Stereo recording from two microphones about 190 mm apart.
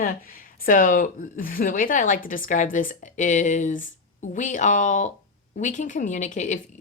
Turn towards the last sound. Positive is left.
turn(degrees=40)  # may be behind; listen again after turning